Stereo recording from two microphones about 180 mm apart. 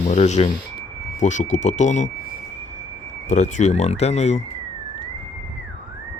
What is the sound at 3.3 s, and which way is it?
Speech, 40° left (ahead or behind).